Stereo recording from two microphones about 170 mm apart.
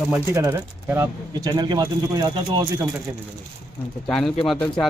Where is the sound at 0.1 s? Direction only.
15° right (ahead or behind).